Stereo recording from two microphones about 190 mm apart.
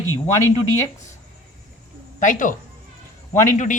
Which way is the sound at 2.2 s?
45° left (ahead or behind).